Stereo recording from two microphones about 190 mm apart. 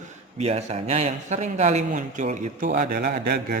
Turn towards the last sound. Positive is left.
turn(degrees=-55)  # may be behind; listen again after turning